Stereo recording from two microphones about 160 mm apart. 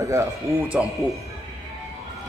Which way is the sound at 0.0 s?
20° right (ahead or behind).